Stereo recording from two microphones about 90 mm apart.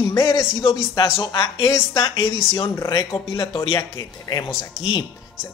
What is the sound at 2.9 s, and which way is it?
A man's voice, 55° left (ahead or behind).